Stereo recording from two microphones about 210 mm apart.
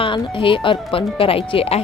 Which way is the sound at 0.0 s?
25° left (ahead or behind).